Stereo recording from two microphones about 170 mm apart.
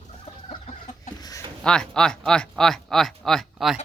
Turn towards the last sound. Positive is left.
turn(degrees=0)  # may be behind; listen again after turning